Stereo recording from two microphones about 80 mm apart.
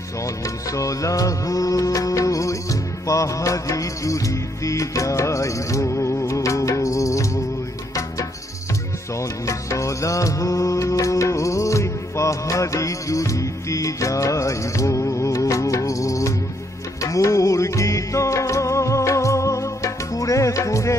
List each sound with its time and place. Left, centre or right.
0.2 s music: left
9.1 s music: left